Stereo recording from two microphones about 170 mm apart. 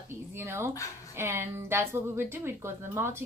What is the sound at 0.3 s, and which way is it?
Speech, 15° right (ahead or behind).